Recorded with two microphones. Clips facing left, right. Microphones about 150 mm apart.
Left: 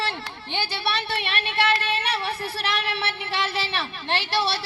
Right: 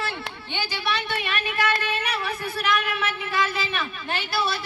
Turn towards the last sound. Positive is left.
turn(degrees=35)  # may be behind; listen again after turning